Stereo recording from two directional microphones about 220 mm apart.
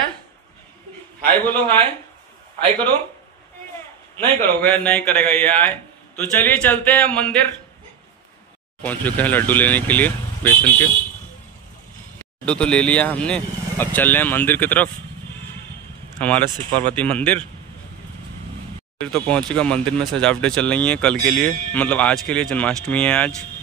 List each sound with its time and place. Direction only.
1.2 s a man's voice: 5° left (ahead or behind)
4.4 s a man's voice: 10° left (ahead or behind)
8.8 s a man's voice: 5° left (ahead or behind)
12.4 s a man's voice: 5° left (ahead or behind)
16.2 s speech: 5° left (ahead or behind)
16.4 s speech: 20° right (ahead or behind)
16.9 s a man's voice: 5° left (ahead or behind)
18.9 s speech: 5° left (ahead or behind)